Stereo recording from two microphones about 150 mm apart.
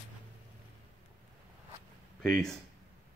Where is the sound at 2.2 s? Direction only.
5° left (ahead or behind).